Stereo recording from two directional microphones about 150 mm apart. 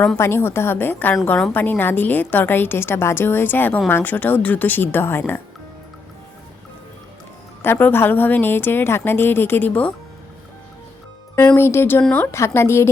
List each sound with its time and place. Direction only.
0.2 s a woman's voice: 15° left (ahead or behind)
7.6 s a woman's voice: 15° left (ahead or behind)
11.3 s a woman's voice: 15° left (ahead or behind)